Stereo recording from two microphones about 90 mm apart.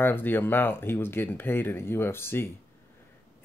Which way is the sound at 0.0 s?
25° left (ahead or behind).